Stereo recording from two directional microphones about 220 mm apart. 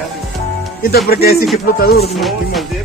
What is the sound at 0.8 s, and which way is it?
Speech, 45° left (ahead or behind).